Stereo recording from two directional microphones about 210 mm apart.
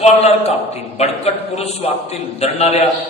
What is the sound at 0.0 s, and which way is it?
A man's voice, 30° left (ahead or behind).